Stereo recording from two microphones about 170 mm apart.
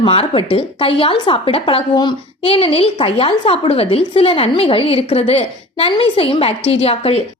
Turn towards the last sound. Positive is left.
turn(degrees=35)  # may be behind; listen again after turning